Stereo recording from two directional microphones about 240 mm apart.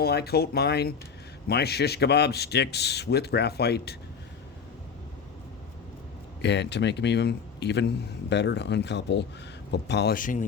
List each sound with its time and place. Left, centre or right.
0.0 s a man's voice: left
6.4 s a man's voice: left